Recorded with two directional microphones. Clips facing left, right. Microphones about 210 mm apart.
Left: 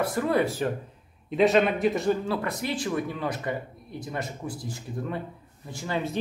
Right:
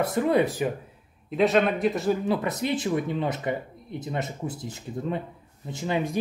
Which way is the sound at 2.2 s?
20° right (ahead or behind).